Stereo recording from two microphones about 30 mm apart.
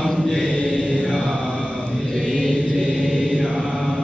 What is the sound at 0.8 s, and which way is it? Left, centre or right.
Mantra, left.